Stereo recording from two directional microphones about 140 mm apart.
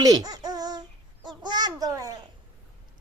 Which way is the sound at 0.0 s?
30° right (ahead or behind).